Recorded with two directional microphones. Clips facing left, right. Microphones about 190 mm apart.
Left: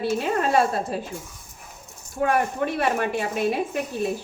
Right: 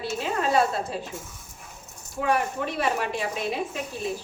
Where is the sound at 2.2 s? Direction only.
55° left (ahead or behind).